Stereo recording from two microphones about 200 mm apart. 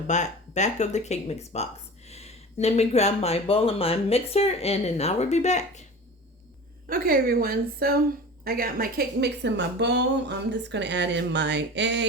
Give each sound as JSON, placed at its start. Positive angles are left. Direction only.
{"t": 0.1, "sound": "speech", "side_deg": 35}
{"t": 6.8, "sound": "a woman's voice", "side_deg": -45}